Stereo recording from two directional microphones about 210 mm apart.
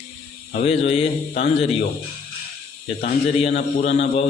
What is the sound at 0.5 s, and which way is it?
Speech, 30° left (ahead or behind).